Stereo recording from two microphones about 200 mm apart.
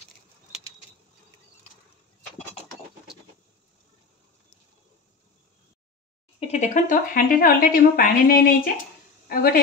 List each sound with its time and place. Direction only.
6.4 s a woman's voice: 35° left (ahead or behind)